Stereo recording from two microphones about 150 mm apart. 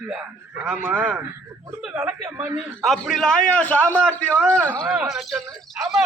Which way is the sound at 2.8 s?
Centre (ahead or behind).